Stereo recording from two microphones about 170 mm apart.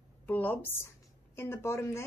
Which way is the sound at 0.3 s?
10° left (ahead or behind).